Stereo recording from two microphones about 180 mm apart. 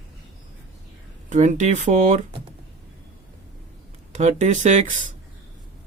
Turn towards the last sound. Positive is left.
turn(degrees=-45)  # may be behind; listen again after turning